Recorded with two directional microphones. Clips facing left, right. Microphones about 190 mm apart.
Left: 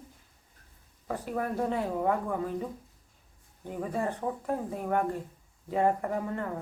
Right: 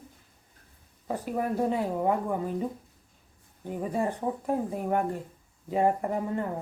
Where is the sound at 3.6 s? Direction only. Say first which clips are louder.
Right 2 dB; 15° right (ahead or behind).